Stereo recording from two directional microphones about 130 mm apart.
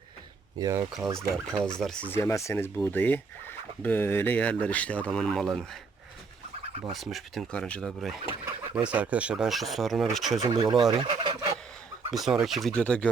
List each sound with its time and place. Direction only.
0.6 s speech: 20° right (ahead or behind)
1.6 s speech: 5° left (ahead or behind)
2.1 s speech: 20° left (ahead or behind); by 5.6 s 5° left (ahead or behind)
6.9 s speech: centre (ahead or behind)
8.7 s speech: 10° right (ahead or behind)
10.4 s speech: 30° right (ahead or behind)
10.9 s fowl: 35° right (ahead or behind)
12.1 s speech: 5° right (ahead or behind)